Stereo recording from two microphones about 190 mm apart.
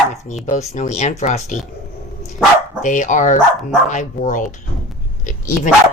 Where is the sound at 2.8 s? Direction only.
40° left (ahead or behind).